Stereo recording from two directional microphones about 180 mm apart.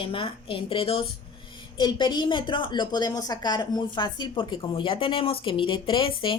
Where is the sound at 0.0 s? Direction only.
30° left (ahead or behind).